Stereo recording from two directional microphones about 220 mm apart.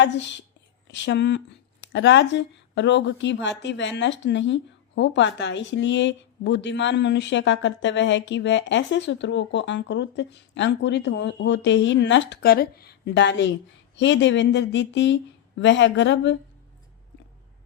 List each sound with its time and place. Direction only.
0.0 s speech: 55° left (ahead or behind)